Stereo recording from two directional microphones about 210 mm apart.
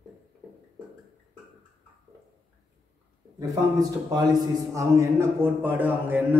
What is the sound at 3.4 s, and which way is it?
Speech, 15° right (ahead or behind).